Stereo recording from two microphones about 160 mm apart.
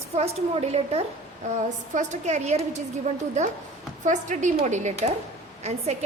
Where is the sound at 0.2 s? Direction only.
40° right (ahead or behind).